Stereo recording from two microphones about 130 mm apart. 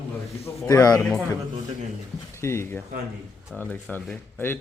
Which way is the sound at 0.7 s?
30° left (ahead or behind).